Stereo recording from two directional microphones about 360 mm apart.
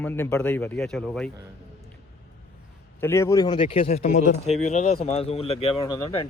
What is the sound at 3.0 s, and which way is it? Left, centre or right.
Speech, centre.